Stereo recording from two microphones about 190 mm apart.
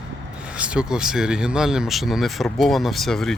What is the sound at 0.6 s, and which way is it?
Speech, 5° right (ahead or behind).